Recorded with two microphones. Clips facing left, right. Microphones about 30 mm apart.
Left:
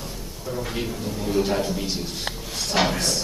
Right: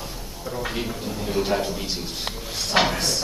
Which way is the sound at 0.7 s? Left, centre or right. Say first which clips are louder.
Even; centre.